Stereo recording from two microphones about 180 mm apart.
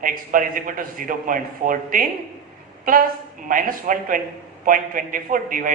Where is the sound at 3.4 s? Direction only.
50° right (ahead or behind).